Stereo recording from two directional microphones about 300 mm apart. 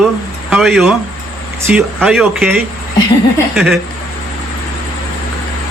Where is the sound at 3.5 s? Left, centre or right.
Centre.